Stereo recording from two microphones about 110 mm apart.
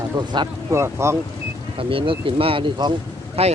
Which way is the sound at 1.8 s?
55° right (ahead or behind).